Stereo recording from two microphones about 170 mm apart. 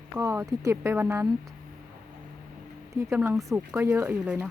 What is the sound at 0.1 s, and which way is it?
Speech, 15° right (ahead or behind).